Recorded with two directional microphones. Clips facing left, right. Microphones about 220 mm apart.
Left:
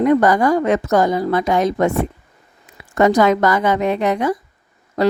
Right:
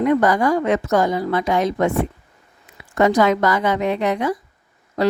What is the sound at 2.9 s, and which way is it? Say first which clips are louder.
A woman's voice: left 2 dB; 40° left (ahead or behind).